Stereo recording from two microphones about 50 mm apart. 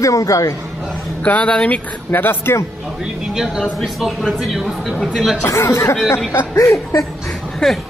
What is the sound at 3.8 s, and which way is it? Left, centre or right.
Speech, centre.